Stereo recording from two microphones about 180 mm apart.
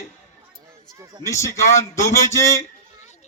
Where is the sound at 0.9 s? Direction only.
15° right (ahead or behind).